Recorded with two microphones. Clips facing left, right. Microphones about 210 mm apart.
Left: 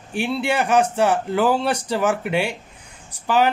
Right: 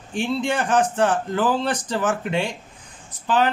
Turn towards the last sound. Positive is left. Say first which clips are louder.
# left 2 dB
turn(degrees=10)  # may be behind; listen again after turning